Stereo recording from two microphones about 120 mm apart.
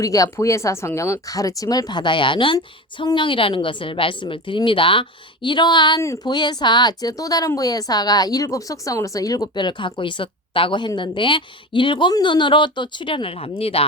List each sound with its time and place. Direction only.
0.0 s a woman's voice: 30° left (ahead or behind); by 13.8 s 55° left (ahead or behind)